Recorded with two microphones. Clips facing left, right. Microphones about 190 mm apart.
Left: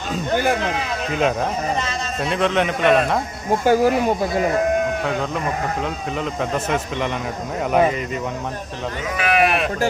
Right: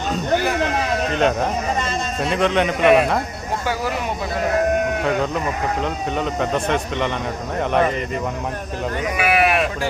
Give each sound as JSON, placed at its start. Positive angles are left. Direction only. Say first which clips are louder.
{"t": 1.1, "sound": "speech", "louder": "left 1 dB", "side_deg": 5}
{"t": 3.7, "sound": "speech", "louder": "left 9 dB", "side_deg": 45}
{"t": 5.8, "sound": "speech", "louder": "right 2 dB", "side_deg": 0}
{"t": 9.1, "sound": "sheep", "louder": "even", "side_deg": -5}